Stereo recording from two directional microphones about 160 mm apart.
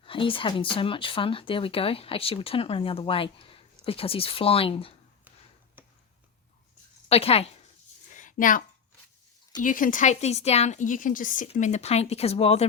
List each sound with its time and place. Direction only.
0.0 s speech: 35° left (ahead or behind)
7.1 s speech: 40° left (ahead or behind)
8.1 s a sound: 55° left (ahead or behind)
9.6 s a woman's voice: 55° left (ahead or behind); by 12.6 s 40° left (ahead or behind)